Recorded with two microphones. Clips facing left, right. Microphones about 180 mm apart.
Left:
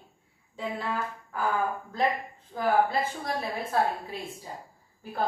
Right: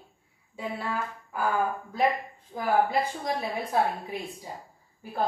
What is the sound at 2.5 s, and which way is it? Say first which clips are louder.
A woman's voice: even; 15° right (ahead or behind).